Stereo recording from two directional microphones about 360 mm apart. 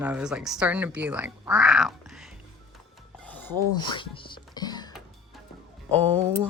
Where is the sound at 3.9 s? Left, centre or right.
Centre.